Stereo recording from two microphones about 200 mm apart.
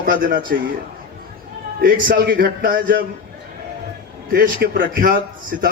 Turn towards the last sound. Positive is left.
turn(degrees=-45)  # may be behind; listen again after turning